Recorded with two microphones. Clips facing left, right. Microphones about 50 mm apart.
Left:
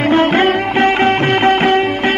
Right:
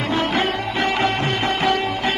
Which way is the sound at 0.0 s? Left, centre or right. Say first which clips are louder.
Left 9 dB; left.